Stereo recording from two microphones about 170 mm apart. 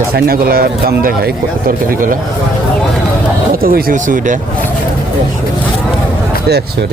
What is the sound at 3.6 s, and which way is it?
Speech, 55° right (ahead or behind).